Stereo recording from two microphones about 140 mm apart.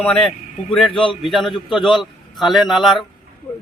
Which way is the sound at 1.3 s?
Centre (ahead or behind).